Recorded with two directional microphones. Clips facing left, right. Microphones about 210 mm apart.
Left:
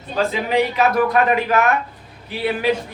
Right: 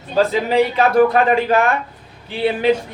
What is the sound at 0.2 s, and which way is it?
A man's voice, 30° right (ahead or behind).